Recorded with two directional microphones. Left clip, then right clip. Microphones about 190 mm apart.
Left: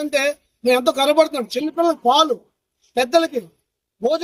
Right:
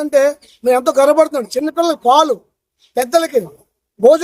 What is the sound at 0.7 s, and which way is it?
A man's voice, 15° right (ahead or behind).